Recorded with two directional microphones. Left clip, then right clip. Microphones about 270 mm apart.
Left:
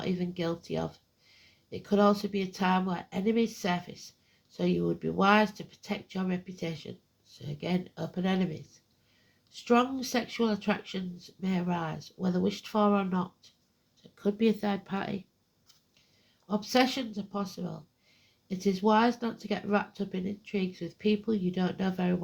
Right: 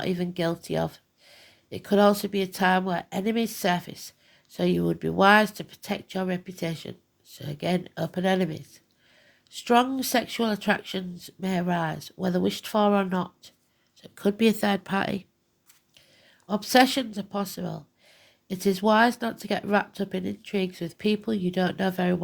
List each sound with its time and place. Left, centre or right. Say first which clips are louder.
0.0 s speech: right 6 dB; right
16.5 s speech: right 7 dB; right